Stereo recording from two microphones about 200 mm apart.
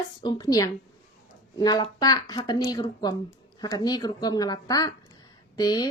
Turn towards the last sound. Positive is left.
turn(degrees=20)  # may be behind; listen again after turning